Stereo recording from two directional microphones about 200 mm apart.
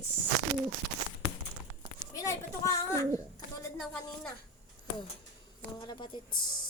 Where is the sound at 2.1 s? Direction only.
15° left (ahead or behind).